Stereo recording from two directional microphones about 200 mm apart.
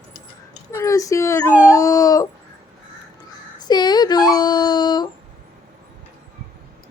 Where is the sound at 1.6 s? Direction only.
15° left (ahead or behind).